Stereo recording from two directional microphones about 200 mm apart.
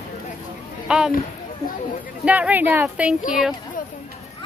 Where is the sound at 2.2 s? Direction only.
5° right (ahead or behind).